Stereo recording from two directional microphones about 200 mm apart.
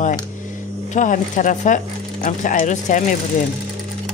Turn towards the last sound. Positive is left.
turn(degrees=40)  # may be behind; listen again after turning